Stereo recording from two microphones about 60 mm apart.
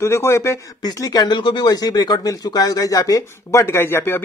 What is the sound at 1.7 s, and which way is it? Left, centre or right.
Speech, left.